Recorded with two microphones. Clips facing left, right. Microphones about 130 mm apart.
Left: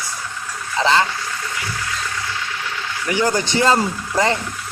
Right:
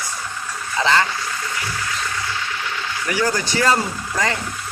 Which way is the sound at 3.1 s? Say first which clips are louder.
Left 3 dB; 20° left (ahead or behind).